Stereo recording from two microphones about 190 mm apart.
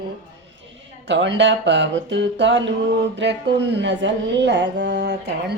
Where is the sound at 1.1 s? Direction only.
70° right (ahead or behind).